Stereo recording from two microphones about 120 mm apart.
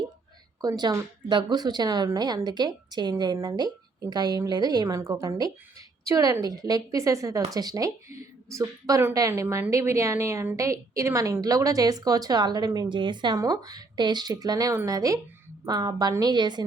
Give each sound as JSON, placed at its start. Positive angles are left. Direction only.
{"t": 0.6, "sound": "a woman's voice", "side_deg": -30}